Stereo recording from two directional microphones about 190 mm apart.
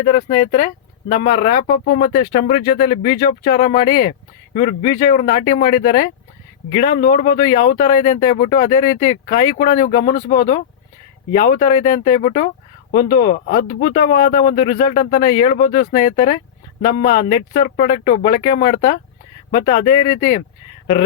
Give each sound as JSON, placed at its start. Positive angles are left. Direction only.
{"t": 0.0, "sound": "speech", "side_deg": 40}
{"t": 12.9, "sound": "speech", "side_deg": 50}